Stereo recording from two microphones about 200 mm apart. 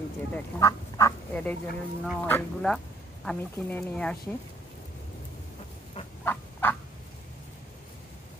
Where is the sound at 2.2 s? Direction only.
5° left (ahead or behind).